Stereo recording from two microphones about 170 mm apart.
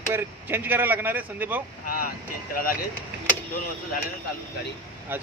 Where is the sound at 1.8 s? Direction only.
60° left (ahead or behind).